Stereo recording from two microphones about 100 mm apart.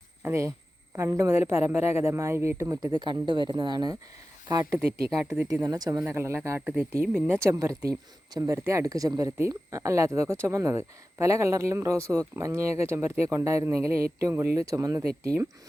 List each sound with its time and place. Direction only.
0.2 s a man's voice: 25° right (ahead or behind)